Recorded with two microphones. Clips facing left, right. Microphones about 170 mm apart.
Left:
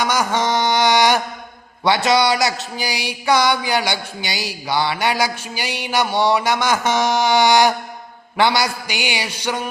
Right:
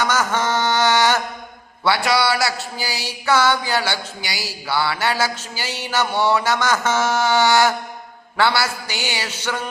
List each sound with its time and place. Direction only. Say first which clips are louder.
0.0 s mantra: left 1 dB; 15° left (ahead or behind)
1.8 s a man's voice: left 3 dB; 20° left (ahead or behind)